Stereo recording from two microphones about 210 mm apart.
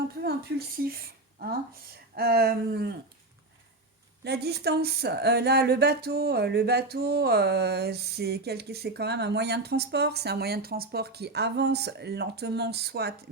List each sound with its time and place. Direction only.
0.2 s speech: 50° right (ahead or behind)
4.2 s speech: 50° right (ahead or behind)